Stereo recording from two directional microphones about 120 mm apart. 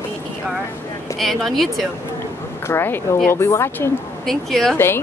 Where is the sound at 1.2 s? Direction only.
Centre (ahead or behind).